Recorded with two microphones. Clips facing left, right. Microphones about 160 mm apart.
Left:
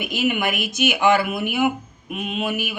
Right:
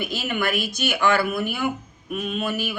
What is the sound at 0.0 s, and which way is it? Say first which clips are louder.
Speech: left 3 dB; 15° left (ahead or behind).